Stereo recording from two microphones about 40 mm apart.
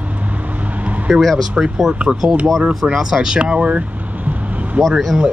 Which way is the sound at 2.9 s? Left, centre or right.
Centre.